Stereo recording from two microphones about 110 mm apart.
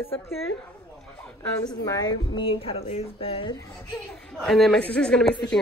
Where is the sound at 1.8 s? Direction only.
35° left (ahead or behind); by 3.5 s 60° left (ahead or behind).